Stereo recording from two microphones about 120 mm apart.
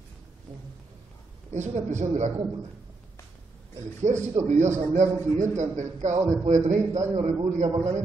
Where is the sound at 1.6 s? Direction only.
85° right.